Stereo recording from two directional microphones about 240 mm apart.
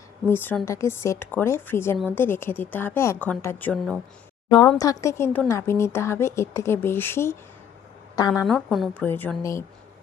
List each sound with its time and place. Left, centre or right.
0.3 s a woman's voice: centre
4.4 s a woman's voice: centre
8.4 s a woman's voice: centre